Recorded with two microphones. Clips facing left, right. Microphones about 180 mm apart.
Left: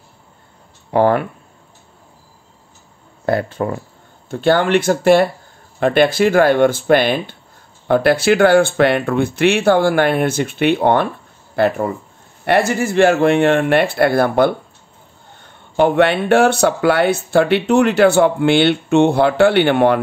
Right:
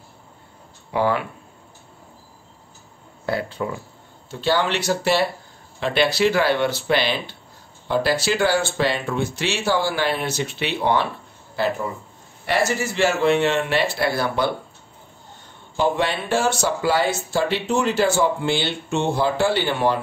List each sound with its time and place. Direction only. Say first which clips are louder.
0.9 s speech: left 7 dB; 50° left (ahead or behind)
3.3 s speech: left 7 dB; 50° left (ahead or behind)